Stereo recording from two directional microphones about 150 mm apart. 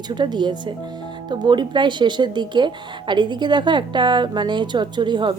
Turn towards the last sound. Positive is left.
turn(degrees=-30)  # may be behind; listen again after turning